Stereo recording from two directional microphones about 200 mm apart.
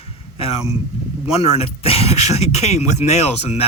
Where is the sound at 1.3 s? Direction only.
30° left (ahead or behind).